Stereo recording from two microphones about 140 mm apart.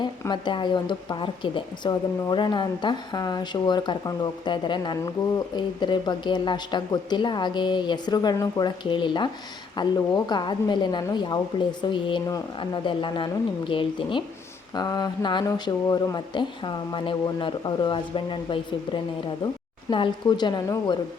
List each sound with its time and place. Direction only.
0.0 s speech: 35° left (ahead or behind)
19.9 s speech: 35° left (ahead or behind)